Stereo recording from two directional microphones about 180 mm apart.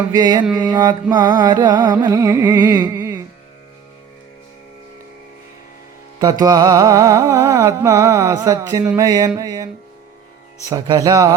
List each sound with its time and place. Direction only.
0.1 s carnatic music: 25° right (ahead or behind)
6.1 s carnatic music: 20° right (ahead or behind)
10.7 s carnatic music: 20° right (ahead or behind)